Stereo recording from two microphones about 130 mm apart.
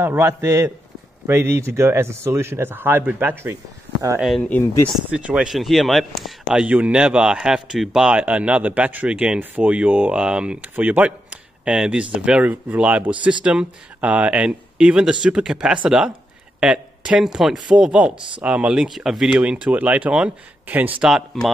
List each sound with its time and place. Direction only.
0.0 s speech: 20° right (ahead or behind)
4.4 s speech: 15° left (ahead or behind)
5.2 s speech: 5° right (ahead or behind)